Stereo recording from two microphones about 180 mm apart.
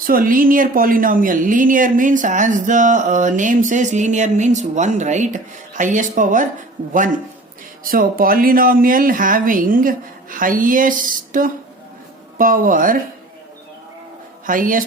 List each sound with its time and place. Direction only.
0.0 s speech: 50° right (ahead or behind)
7.9 s speech: 50° right (ahead or behind)
14.4 s speech: 50° right (ahead or behind)